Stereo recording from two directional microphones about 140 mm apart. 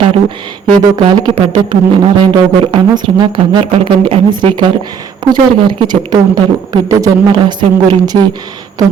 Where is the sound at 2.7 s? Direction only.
35° right (ahead or behind).